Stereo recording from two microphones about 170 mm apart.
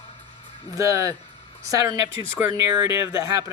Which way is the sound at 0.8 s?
20° right (ahead or behind).